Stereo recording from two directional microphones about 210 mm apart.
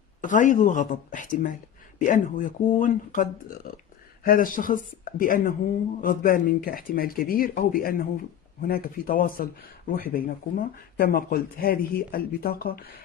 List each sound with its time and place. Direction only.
0.2 s speech: 40° left (ahead or behind)